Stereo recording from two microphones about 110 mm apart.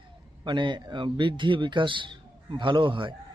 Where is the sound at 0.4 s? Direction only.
45° right (ahead or behind).